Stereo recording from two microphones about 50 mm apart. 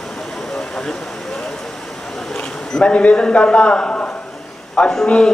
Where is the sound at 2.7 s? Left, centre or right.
Centre.